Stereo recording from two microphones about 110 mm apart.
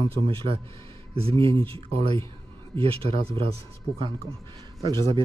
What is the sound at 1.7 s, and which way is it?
Speech, 55° right (ahead or behind).